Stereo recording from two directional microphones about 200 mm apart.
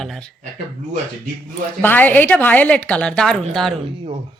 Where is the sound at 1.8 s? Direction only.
10° left (ahead or behind).